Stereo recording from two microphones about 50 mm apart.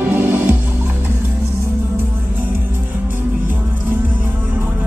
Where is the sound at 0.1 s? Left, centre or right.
Right.